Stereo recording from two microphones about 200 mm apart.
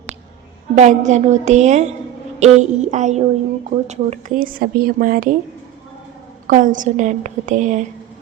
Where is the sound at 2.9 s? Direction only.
35° right (ahead or behind).